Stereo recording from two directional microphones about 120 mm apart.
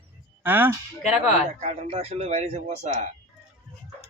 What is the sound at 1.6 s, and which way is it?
A man's voice, 60° right (ahead or behind).